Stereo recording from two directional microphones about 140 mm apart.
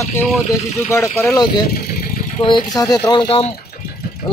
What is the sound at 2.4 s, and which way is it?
Speech, 35° left (ahead or behind).